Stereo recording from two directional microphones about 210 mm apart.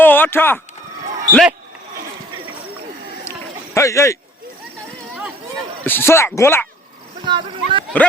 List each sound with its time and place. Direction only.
0.0 s a man's voice: 10° left (ahead or behind)
3.8 s speech: 15° left (ahead or behind)
5.8 s speech: 10° left (ahead or behind)
7.3 s speech: 25° right (ahead or behind)